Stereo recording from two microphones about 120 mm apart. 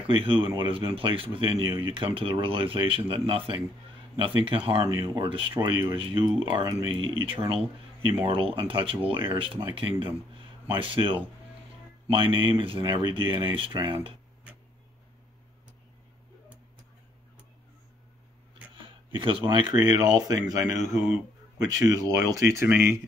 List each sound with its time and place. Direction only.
0.0 s speech: 50° right (ahead or behind)
4.8 s a man's voice: 35° right (ahead or behind)
19.1 s a man's voice: 45° right (ahead or behind); by 22.9 s 20° right (ahead or behind)